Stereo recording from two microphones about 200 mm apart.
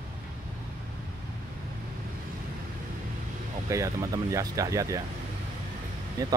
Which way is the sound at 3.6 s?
15° right (ahead or behind).